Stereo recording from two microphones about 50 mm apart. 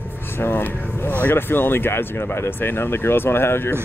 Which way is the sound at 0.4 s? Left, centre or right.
Left.